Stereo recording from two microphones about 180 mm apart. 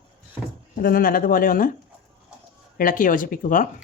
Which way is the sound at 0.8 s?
50° left (ahead or behind).